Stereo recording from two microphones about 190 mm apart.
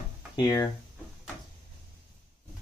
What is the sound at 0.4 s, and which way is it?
Speech, 20° left (ahead or behind).